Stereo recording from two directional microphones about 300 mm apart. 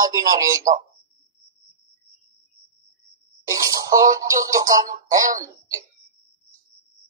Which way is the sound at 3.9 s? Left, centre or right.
Centre.